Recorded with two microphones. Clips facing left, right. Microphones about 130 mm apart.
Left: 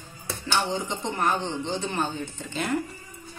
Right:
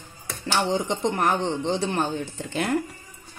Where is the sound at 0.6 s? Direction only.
75° right (ahead or behind).